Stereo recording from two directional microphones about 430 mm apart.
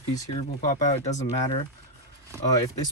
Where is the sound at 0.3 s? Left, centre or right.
Centre.